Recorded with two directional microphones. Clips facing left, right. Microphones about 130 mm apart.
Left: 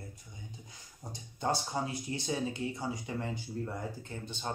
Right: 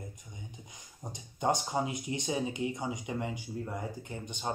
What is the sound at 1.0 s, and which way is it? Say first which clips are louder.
Speech: right 3 dB; 20° right (ahead or behind).